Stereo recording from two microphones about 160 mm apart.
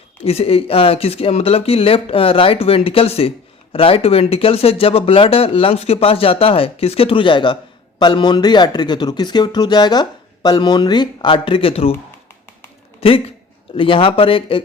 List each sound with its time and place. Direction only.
0.2 s speech: 40° left (ahead or behind)
13.0 s speech: 35° left (ahead or behind)